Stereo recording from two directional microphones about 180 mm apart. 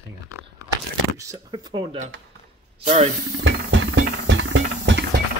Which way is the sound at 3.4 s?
90° right.